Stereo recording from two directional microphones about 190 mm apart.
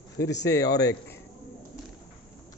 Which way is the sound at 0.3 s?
65° left (ahead or behind).